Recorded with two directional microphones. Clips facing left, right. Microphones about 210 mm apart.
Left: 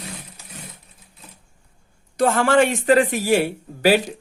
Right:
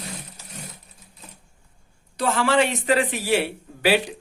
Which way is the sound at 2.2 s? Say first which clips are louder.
Left 4 dB; 50° left (ahead or behind).